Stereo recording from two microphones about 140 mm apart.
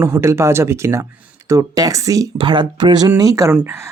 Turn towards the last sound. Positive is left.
turn(degrees=-15)  # may be behind; listen again after turning